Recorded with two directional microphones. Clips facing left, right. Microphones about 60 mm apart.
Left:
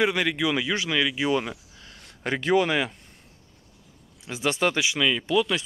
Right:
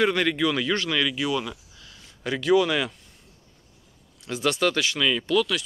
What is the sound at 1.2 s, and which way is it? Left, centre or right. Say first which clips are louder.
Speech: left 2 dB; left.